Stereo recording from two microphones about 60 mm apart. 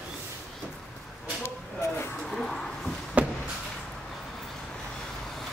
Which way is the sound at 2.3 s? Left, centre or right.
Centre.